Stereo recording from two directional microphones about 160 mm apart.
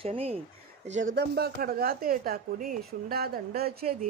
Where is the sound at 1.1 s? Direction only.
80° right.